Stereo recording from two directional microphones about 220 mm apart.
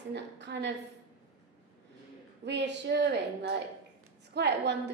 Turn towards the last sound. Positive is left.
turn(degrees=-50)  # may be behind; listen again after turning